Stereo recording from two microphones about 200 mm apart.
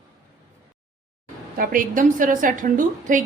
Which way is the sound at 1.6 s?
45° right (ahead or behind).